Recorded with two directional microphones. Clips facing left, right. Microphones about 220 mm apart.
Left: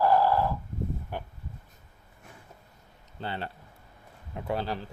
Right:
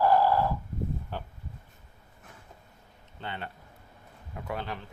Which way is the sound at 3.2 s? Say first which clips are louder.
Left 3 dB; 35° left (ahead or behind).